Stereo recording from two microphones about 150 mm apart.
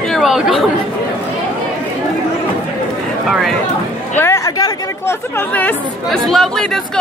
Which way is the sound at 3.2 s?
Centre (ahead or behind).